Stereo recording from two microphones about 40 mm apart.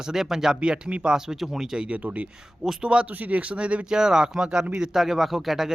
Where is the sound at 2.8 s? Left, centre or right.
Right.